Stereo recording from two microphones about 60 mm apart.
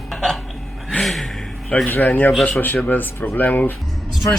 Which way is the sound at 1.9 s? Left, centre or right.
Left.